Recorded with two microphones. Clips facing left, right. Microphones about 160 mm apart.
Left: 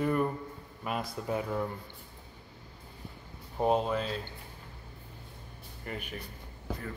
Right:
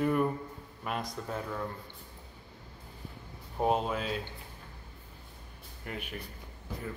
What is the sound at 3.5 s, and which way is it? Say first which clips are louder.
Speech: left 2 dB; centre (ahead or behind).